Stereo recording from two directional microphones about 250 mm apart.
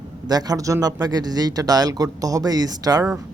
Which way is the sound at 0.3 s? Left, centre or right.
Centre.